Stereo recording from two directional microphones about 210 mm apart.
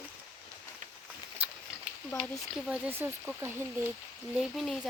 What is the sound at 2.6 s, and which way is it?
Speech, 5° right (ahead or behind).